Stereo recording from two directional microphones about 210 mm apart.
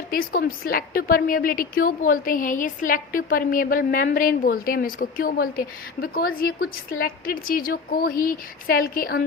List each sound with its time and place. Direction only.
0.1 s a woman's voice: 45° left (ahead or behind)